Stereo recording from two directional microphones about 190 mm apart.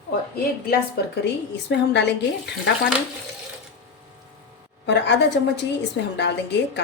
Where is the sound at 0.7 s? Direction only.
60° left (ahead or behind).